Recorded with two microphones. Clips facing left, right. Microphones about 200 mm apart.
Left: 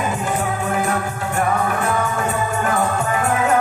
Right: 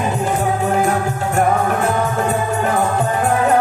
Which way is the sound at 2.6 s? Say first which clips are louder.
Right 1 dB; 40° right (ahead or behind).